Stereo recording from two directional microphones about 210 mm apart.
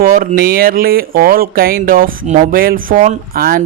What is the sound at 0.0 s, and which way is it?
Speech, 45° right (ahead or behind).